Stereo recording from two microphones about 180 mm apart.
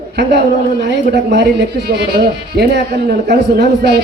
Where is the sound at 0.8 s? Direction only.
70° right (ahead or behind).